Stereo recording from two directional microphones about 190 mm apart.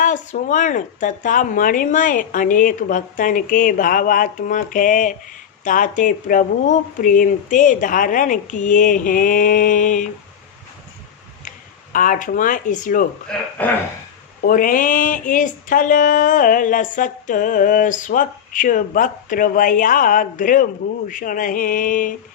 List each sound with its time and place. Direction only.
0.0 s speech: 40° left (ahead or behind)
11.4 s speech: 45° left (ahead or behind)
13.3 s speech: 5° left (ahead or behind)
14.4 s speech: 45° left (ahead or behind)